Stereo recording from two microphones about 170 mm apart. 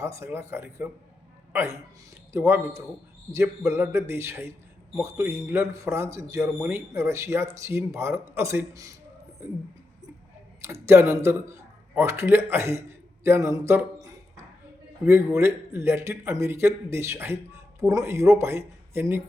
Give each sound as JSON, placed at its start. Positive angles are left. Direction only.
{"t": 0.0, "sound": "speech", "side_deg": -15}
{"t": 10.6, "sound": "speech", "side_deg": -15}
{"t": 15.4, "sound": "speech", "side_deg": -15}